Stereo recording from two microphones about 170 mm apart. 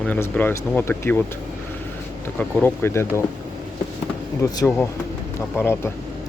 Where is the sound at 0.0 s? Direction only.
10° left (ahead or behind).